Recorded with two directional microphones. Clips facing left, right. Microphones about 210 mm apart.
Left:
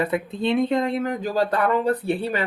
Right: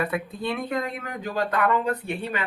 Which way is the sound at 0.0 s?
25° left (ahead or behind).